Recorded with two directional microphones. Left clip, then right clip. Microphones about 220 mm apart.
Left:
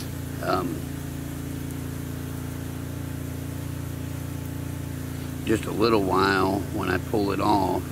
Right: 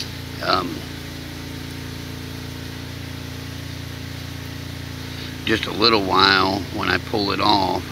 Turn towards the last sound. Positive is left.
turn(degrees=5)  # may be behind; listen again after turning